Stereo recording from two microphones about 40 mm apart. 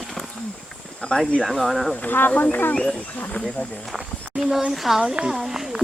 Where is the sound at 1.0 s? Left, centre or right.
Left.